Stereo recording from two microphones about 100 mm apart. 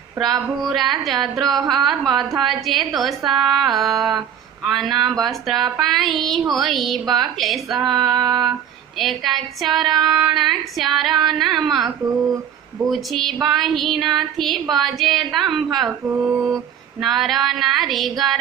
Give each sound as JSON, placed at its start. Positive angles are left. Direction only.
{"t": 0.2, "sound": "speech", "side_deg": 0}
{"t": 12.0, "sound": "speech", "side_deg": -35}
{"t": 12.8, "sound": "speech", "side_deg": 0}
{"t": 16.0, "sound": "mantra", "side_deg": -15}
{"t": 17.0, "sound": "speech", "side_deg": 0}